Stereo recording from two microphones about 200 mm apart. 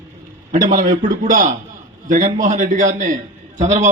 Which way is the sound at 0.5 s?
40° right (ahead or behind).